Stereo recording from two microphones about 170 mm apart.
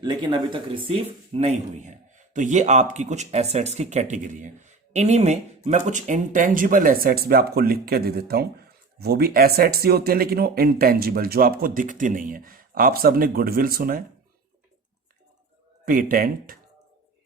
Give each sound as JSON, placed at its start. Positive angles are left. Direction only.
{"t": 0.0, "sound": "speech", "side_deg": -25}
{"t": 15.9, "sound": "speech", "side_deg": -55}